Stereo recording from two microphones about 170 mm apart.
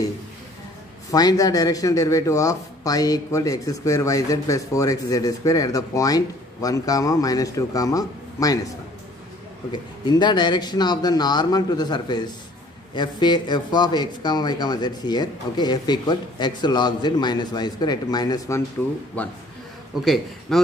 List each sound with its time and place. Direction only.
1.1 s speech: 20° left (ahead or behind)
9.7 s speech: 25° left (ahead or behind)
20.1 s a man's voice: centre (ahead or behind)